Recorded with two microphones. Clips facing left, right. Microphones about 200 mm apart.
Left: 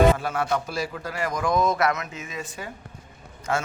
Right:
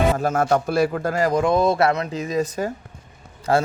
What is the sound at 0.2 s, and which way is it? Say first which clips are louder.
A man's voice: right 6 dB; 45° right (ahead or behind).